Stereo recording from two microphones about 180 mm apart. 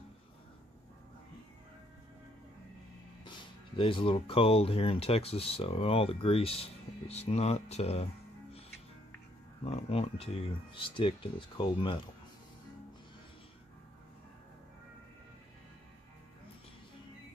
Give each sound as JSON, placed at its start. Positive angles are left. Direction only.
{"t": 3.3, "sound": "speech", "side_deg": 30}
{"t": 9.7, "sound": "speech", "side_deg": 35}